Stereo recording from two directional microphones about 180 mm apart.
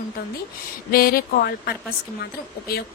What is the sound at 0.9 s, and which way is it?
A woman's voice, 55° left (ahead or behind).